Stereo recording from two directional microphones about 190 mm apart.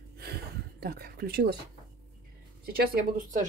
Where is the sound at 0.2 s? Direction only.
55° right (ahead or behind).